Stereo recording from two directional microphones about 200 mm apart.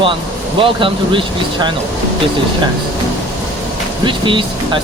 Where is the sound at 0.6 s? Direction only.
25° right (ahead or behind).